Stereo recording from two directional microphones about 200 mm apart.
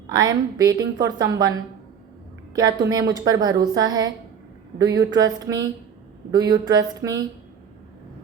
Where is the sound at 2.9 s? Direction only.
20° right (ahead or behind).